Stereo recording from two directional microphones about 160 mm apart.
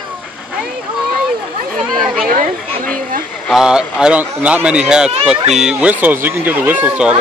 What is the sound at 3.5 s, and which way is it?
A man's voice, 5° right (ahead or behind).